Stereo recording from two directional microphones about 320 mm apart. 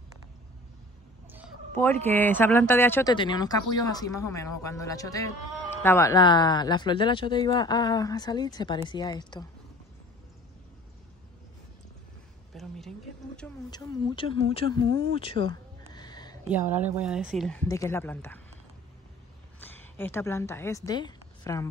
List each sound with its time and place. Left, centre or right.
2.0 s speech: centre
12.5 s a sound: centre
13.4 s speech: centre
15.5 s a sound: centre
16.4 s speech: centre
19.6 s a woman's voice: centre